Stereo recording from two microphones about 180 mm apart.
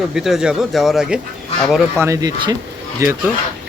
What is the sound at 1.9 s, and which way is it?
Speech, 15° right (ahead or behind).